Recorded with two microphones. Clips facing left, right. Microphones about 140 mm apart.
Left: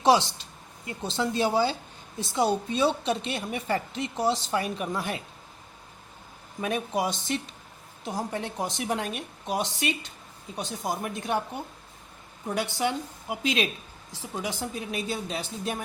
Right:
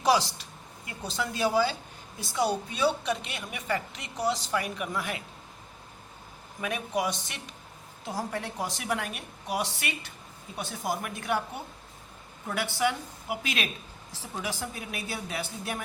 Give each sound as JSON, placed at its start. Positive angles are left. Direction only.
{"t": 0.0, "sound": "a woman's voice", "side_deg": 25}
{"t": 6.6, "sound": "a woman's voice", "side_deg": 30}